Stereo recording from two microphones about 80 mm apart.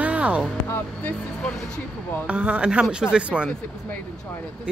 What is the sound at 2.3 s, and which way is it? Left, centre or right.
Speech, centre.